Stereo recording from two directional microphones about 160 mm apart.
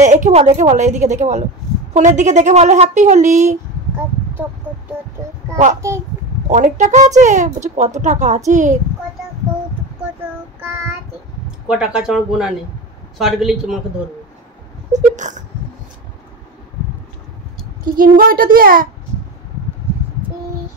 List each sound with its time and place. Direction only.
0.0 s speech: 50° right (ahead or behind)
6.4 s speech: 50° right (ahead or behind)
11.6 s speech: 5° right (ahead or behind)
14.9 s a sound: 50° right (ahead or behind)
17.9 s a child's voice: 60° right (ahead or behind)